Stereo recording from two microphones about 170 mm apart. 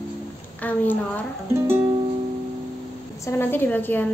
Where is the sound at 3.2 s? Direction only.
10° left (ahead or behind).